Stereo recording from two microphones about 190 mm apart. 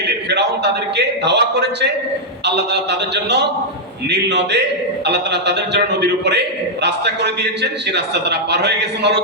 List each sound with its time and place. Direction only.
0.3 s a man's voice: 60° right (ahead or behind)